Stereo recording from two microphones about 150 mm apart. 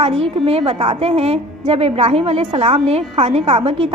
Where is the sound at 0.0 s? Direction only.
40° right (ahead or behind).